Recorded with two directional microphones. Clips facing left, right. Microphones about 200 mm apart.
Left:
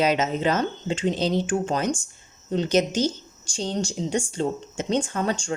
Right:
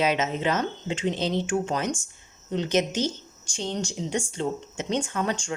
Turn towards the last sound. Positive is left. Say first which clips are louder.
# left 2 dB
turn(degrees=35)  # may be behind; listen again after turning